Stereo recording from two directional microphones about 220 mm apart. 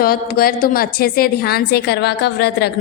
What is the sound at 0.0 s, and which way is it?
A woman's voice, 45° left (ahead or behind).